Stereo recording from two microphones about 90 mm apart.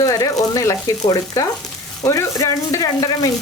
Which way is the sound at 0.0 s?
40° left (ahead or behind).